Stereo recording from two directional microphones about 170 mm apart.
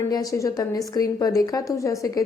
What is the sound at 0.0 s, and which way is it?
Speech, 20° left (ahead or behind).